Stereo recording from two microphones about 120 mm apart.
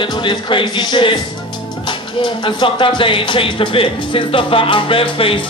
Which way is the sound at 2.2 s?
40° left (ahead or behind).